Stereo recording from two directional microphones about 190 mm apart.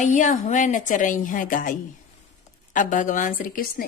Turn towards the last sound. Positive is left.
turn(degrees=50)  # may be behind; listen again after turning